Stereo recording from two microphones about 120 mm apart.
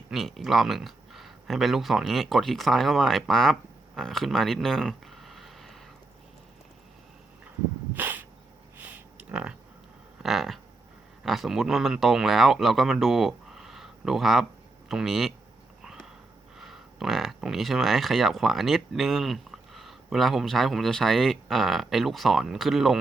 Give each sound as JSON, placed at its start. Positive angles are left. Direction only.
{"t": 0.1, "sound": "speech", "side_deg": 0}
{"t": 7.9, "sound": "sneeze", "side_deg": -15}
{"t": 8.8, "sound": "a sound", "side_deg": -10}
{"t": 11.2, "sound": "speech", "side_deg": 0}
{"t": 15.8, "sound": "a sound", "side_deg": -5}
{"t": 16.6, "sound": "speech", "side_deg": -5}